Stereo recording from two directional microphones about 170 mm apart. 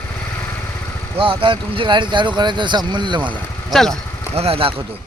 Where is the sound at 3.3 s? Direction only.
Centre (ahead or behind).